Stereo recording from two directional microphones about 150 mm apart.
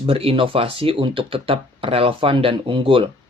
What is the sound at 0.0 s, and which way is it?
Speech, 40° right (ahead or behind).